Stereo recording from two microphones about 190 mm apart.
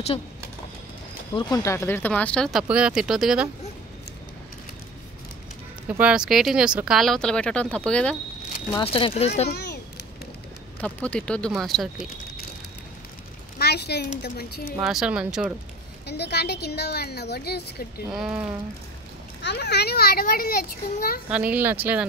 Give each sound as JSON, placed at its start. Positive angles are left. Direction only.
{"t": 1.3, "sound": "speech", "side_deg": 20}
{"t": 5.9, "sound": "speech", "side_deg": -5}
{"t": 8.7, "sound": "speech", "side_deg": 30}
{"t": 9.5, "sound": "a sound", "side_deg": 60}
{"t": 10.8, "sound": "speech", "side_deg": 5}
{"t": 13.6, "sound": "a woman's voice", "side_deg": 60}
{"t": 14.9, "sound": "speech", "side_deg": -5}
{"t": 16.1, "sound": "a woman's voice", "side_deg": 60}
{"t": 18.1, "sound": "speech", "side_deg": 0}
{"t": 19.4, "sound": "a child's voice", "side_deg": 60}
{"t": 21.3, "sound": "speech", "side_deg": -5}